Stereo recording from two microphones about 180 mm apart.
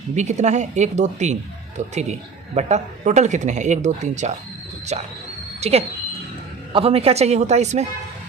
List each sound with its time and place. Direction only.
0.2 s speech: 40° right (ahead or behind)
2.6 s speech: 40° right (ahead or behind)